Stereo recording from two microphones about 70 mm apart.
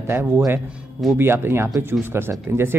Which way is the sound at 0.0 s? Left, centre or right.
Right.